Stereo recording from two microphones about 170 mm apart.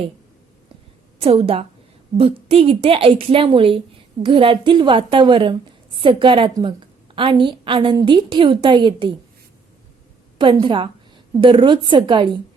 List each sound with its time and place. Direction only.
1.2 s a woman's voice: 35° right (ahead or behind)
10.3 s a woman's voice: 30° right (ahead or behind)